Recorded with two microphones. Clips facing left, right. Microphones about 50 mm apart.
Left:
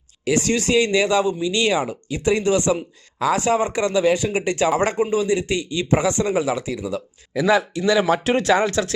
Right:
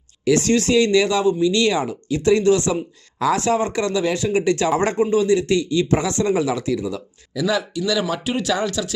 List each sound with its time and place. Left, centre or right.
0.3 s speech: centre
7.3 s speech: left
8.2 s speech: left